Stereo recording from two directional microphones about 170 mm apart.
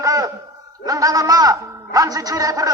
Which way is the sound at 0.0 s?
20° right (ahead or behind).